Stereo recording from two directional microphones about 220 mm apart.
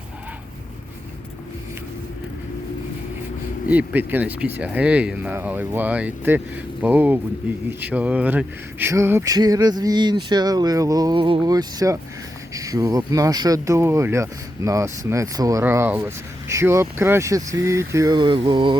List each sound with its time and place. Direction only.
3.7 s speech: 5° right (ahead or behind)
18.4 s mantra: 20° right (ahead or behind)